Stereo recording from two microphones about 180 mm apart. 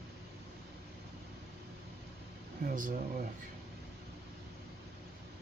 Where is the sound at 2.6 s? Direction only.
50° right (ahead or behind).